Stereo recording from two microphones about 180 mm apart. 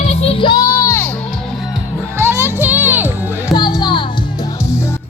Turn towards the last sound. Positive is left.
turn(degrees=25)  # may be behind; listen again after turning